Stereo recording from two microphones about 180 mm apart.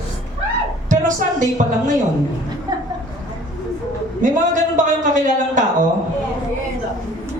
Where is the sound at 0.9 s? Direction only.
45° right (ahead or behind).